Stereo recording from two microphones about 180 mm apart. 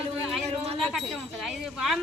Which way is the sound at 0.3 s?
Centre (ahead or behind).